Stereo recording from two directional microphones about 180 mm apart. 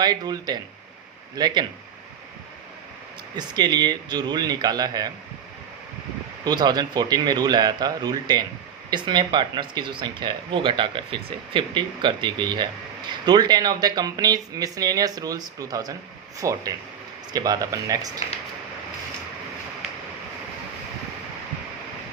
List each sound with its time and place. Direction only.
0.0 s speech: 20° right (ahead or behind)
3.3 s speech: 25° right (ahead or behind)
6.4 s speech: 25° right (ahead or behind)